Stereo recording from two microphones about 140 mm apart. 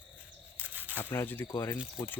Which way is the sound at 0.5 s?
10° right (ahead or behind).